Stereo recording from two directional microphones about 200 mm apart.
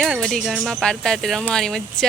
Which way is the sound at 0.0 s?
Centre (ahead or behind).